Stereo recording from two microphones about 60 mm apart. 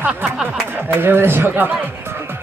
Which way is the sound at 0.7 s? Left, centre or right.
Right.